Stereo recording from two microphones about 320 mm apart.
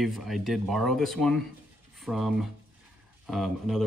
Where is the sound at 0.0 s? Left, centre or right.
Centre.